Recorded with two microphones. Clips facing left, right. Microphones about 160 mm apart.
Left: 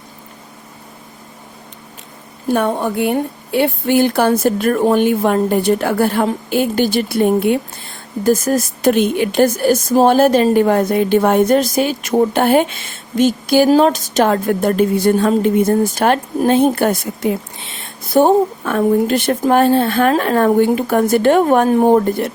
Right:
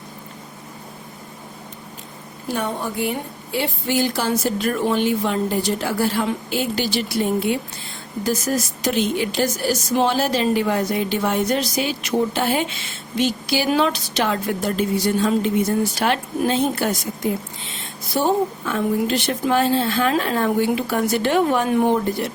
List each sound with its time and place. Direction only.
2.5 s a woman's voice: 55° left (ahead or behind)